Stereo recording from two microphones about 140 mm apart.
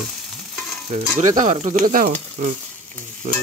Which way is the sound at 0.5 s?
Centre (ahead or behind).